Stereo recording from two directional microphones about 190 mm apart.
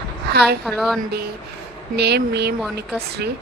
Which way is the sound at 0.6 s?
5° left (ahead or behind).